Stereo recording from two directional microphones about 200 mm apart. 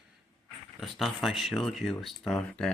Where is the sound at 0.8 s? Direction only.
Centre (ahead or behind).